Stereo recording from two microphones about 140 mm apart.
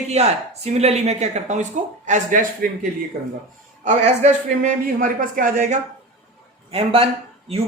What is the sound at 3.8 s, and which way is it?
A man's voice, 60° right (ahead or behind).